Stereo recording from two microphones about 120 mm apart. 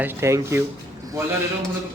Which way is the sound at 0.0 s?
25° right (ahead or behind).